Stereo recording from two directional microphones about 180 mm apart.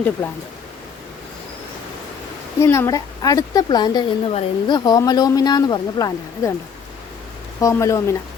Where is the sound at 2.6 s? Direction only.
15° left (ahead or behind).